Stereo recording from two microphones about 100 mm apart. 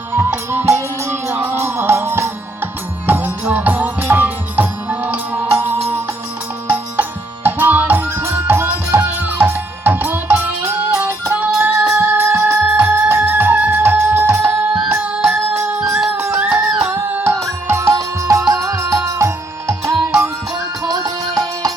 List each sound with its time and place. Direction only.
0.1 s music: 20° right (ahead or behind)
7.4 s music: 15° right (ahead or behind)
11.8 s music: 5° right (ahead or behind)
12.1 s music: 20° right (ahead or behind)
15.6 s a sound: 10° right (ahead or behind)
16.1 s music: 25° right (ahead or behind)
16.4 s music: 15° right (ahead or behind); by 21.7 s 40° right (ahead or behind)